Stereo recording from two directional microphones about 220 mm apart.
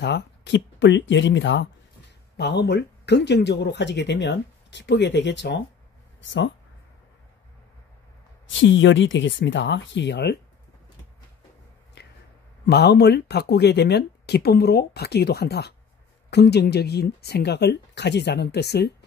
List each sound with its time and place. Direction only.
0.0 s speech: 50° left (ahead or behind)
8.5 s speech: 55° left (ahead or behind)
12.6 s speech: 50° left (ahead or behind)